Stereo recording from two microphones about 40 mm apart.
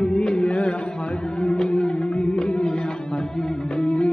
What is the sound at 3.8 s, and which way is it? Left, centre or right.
Music, left.